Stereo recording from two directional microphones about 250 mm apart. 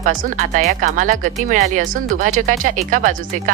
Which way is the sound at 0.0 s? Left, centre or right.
Right.